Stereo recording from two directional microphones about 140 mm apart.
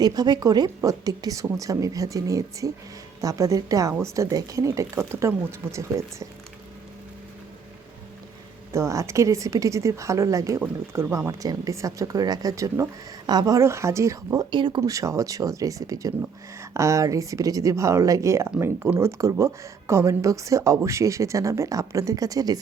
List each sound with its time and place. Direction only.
0.0 s speech: 30° right (ahead or behind)
8.7 s speech: 20° right (ahead or behind)
14.5 s speech: 35° right (ahead or behind)
14.8 s speech: 20° right (ahead or behind)